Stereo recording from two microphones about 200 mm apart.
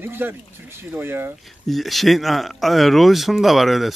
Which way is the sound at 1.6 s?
Centre (ahead or behind).